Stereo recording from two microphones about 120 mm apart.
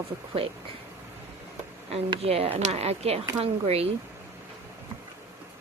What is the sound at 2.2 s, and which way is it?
Speech, 55° right (ahead or behind).